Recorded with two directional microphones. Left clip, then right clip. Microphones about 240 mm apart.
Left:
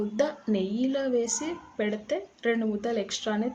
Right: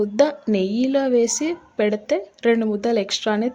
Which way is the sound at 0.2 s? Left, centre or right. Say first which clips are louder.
Right 8 dB; right.